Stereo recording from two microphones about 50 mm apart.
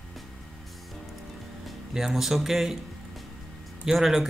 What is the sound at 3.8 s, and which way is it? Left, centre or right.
Speech, centre.